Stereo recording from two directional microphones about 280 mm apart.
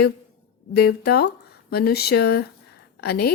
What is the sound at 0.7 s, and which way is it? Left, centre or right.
A woman's voice, left.